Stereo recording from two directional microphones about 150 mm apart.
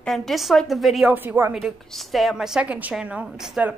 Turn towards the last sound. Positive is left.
turn(degrees=-5)  # may be behind; listen again after turning